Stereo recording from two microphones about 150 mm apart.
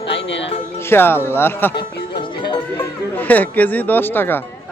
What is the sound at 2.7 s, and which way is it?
Speech, 10° left (ahead or behind).